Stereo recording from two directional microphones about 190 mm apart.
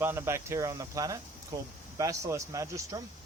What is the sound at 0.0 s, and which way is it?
A man's voice, 10° right (ahead or behind).